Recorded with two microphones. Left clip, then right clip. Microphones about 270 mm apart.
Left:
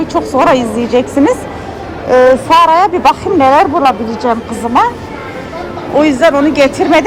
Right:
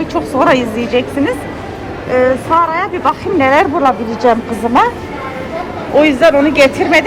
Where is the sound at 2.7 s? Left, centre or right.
Centre.